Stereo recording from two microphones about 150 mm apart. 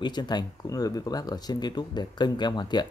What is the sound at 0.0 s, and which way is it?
Speech, 30° left (ahead or behind).